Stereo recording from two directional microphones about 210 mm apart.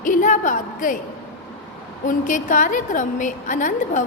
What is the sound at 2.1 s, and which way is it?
A woman's voice, 40° left (ahead or behind).